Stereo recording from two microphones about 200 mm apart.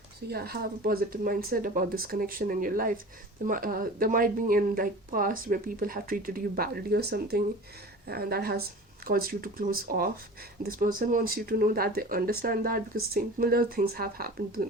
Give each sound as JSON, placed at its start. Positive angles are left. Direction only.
{"t": 0.3, "sound": "speech", "side_deg": -50}